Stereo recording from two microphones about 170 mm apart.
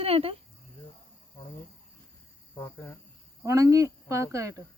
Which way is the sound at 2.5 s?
15° left (ahead or behind).